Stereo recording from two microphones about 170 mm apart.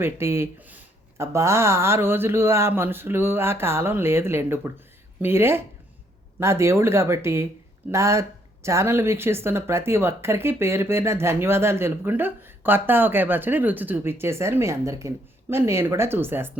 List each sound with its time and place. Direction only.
0.0 s speech: 15° right (ahead or behind)